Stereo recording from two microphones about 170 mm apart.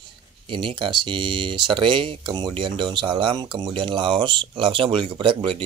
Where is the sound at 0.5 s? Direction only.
30° right (ahead or behind).